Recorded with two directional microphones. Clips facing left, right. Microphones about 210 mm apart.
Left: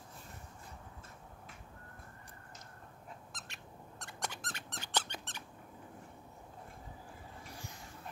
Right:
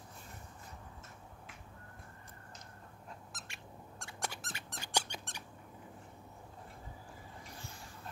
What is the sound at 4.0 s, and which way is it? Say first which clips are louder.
Dog: even; 5° right (ahead or behind).